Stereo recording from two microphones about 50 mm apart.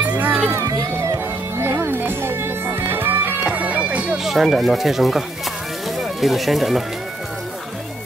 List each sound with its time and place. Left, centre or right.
0.0 s music: right
0.5 s music: right
1.6 s music: right
3.4 s music: right
4.2 s speech: centre
5.9 s music: centre